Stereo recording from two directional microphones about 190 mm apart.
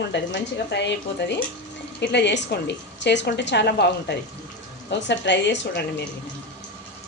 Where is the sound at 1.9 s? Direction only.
65° left (ahead or behind).